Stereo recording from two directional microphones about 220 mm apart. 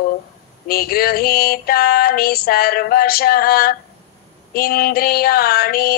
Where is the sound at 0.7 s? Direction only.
45° left (ahead or behind).